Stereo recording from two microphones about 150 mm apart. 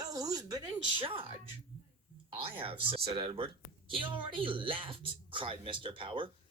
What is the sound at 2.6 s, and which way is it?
Speech, 40° right (ahead or behind).